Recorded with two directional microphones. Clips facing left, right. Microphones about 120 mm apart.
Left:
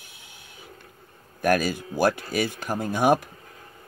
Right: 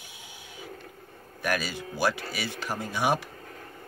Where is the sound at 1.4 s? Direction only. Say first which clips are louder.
Left 7 dB; 50° left (ahead or behind).